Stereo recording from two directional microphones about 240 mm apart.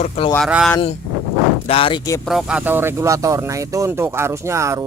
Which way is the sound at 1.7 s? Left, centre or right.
Left.